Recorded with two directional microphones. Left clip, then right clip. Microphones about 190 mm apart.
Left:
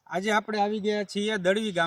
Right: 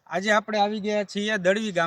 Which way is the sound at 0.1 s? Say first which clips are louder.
Right 4 dB; 10° right (ahead or behind).